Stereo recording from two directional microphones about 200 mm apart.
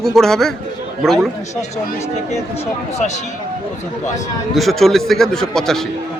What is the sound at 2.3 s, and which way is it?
Speech, 35° left (ahead or behind).